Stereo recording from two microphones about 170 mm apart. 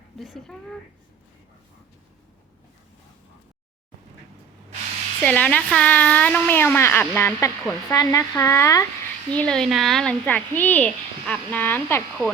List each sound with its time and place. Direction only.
0.2 s speech: centre (ahead or behind)
5.2 s speech: 10° left (ahead or behind)
9.3 s speech: 5° left (ahead or behind)